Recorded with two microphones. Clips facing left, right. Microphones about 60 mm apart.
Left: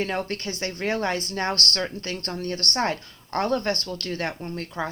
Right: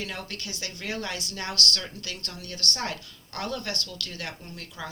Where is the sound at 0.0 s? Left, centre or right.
Left.